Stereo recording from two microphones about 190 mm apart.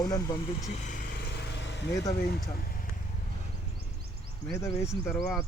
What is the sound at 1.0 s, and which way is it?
Vehicle, 65° left (ahead or behind).